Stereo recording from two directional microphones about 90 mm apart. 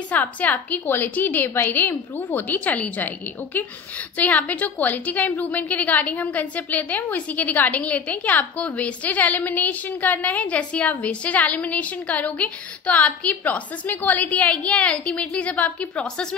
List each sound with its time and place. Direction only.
0.1 s a woman's voice: 15° left (ahead or behind)